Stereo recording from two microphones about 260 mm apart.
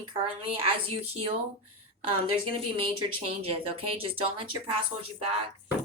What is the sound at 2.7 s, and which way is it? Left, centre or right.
Speech, right.